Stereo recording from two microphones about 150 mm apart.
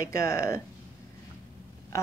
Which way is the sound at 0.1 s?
20° left (ahead or behind).